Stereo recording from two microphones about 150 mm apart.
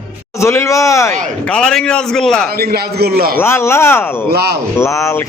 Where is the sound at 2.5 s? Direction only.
90° right.